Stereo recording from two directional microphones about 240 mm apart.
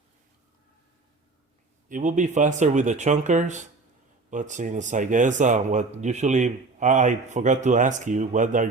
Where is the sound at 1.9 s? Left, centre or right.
Right.